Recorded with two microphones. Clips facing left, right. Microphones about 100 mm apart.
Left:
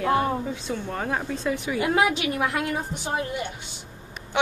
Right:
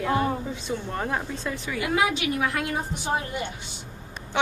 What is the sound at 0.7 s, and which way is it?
Speech, centre (ahead or behind).